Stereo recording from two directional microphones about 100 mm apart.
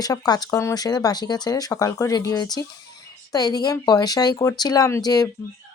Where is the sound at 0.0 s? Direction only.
40° left (ahead or behind).